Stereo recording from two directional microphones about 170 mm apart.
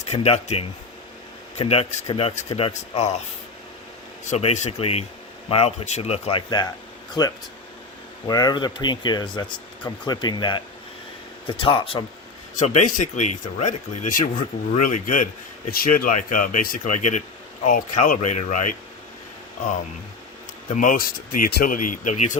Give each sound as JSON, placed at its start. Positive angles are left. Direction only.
{"t": 0.1, "sound": "speech", "side_deg": 40}
{"t": 4.3, "sound": "speech", "side_deg": 40}
{"t": 6.5, "sound": "speech", "side_deg": 25}
{"t": 12.5, "sound": "speech", "side_deg": 45}
{"t": 20.7, "sound": "speech", "side_deg": 50}